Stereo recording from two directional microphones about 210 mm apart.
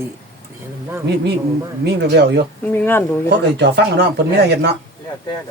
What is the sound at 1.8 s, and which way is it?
Speech, 50° right (ahead or behind).